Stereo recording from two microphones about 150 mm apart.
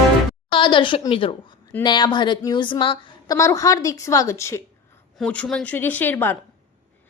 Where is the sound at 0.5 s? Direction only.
35° left (ahead or behind).